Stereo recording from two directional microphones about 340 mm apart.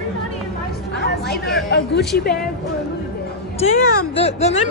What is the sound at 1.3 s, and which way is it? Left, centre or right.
Speech, left.